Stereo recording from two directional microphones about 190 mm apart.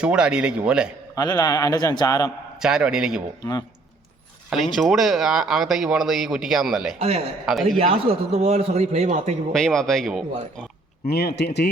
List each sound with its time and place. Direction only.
0.0 s speech: 5° right (ahead or behind)
1.1 s a man's voice: 20° left (ahead or behind)
2.6 s speech: 5° right (ahead or behind)
4.4 s speech: centre (ahead or behind)
7.0 s a man's voice: 30° right (ahead or behind)
7.5 s speech: centre (ahead or behind)
8.0 s a man's voice: 30° right (ahead or behind)
9.5 s speech: centre (ahead or behind)
11.0 s speech: 55° left (ahead or behind)